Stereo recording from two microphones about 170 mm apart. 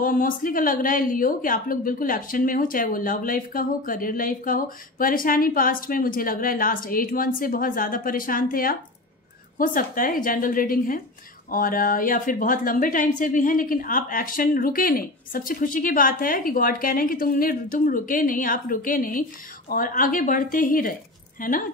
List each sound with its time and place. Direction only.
0.0 s a woman's voice: 55° left (ahead or behind)